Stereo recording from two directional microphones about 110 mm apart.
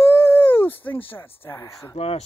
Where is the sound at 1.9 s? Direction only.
60° left (ahead or behind).